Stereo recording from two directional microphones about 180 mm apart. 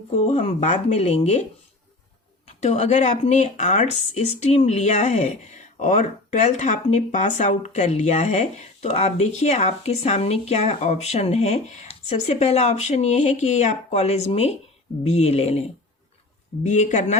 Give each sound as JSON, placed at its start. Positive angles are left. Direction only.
{"t": 0.2, "sound": "speech", "side_deg": 40}
{"t": 2.5, "sound": "speech", "side_deg": 40}
{"t": 16.6, "sound": "speech", "side_deg": 40}